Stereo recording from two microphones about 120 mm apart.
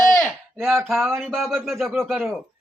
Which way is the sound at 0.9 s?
Centre (ahead or behind).